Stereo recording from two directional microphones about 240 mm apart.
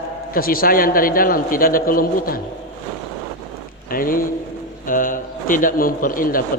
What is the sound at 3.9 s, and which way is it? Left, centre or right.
A man's voice, left.